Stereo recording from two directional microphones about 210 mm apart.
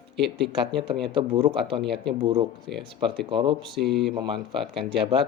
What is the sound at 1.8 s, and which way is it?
Speech, 50° right (ahead or behind).